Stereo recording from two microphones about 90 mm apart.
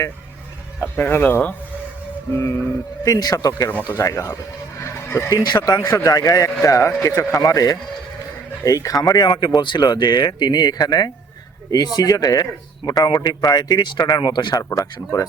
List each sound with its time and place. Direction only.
0.8 s speech: 25° left (ahead or behind)
4.8 s a sound: 30° left (ahead or behind)
5.3 s speech: 45° left (ahead or behind)
5.8 s speech: 30° left (ahead or behind); by 14.6 s 55° left (ahead or behind)
14.6 s speech: 30° left (ahead or behind)
14.9 s speech: 45° left (ahead or behind)